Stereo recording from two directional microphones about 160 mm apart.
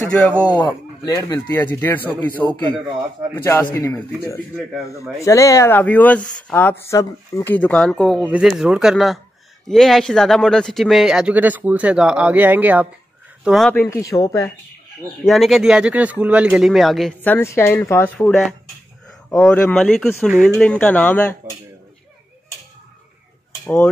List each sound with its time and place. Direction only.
0.0 s speech: 10° left (ahead or behind)
1.0 s speech: 20° left (ahead or behind)
3.7 s speech: 15° left (ahead or behind)
5.2 s speech: 20° left (ahead or behind); by 13.7 s 5° right (ahead or behind)
13.7 s speech: 15° left (ahead or behind)
15.2 s speech: centre (ahead or behind)
17.2 s speech: 15° left (ahead or behind)
23.6 s a sound: 15° left (ahead or behind)